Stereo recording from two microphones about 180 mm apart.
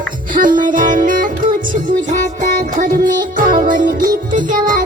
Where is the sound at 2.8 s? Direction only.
50° right (ahead or behind).